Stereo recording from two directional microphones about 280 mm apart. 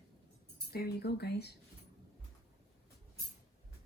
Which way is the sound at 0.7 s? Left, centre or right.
Left.